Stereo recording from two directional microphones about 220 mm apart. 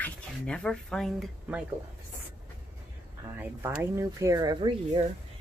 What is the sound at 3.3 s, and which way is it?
Speech, 10° right (ahead or behind).